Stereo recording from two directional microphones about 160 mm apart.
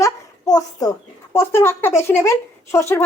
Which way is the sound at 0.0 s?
25° left (ahead or behind).